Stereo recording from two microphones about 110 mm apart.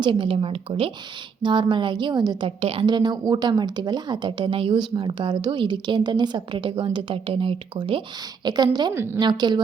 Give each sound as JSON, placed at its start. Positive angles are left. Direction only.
{"t": 0.0, "sound": "a woman's voice", "side_deg": -50}
{"t": 1.4, "sound": "a woman's voice", "side_deg": -45}
{"t": 2.6, "sound": "a woman's voice", "side_deg": -65}
{"t": 2.8, "sound": "a woman's voice", "side_deg": -40}
{"t": 8.4, "sound": "a woman's voice", "side_deg": -40}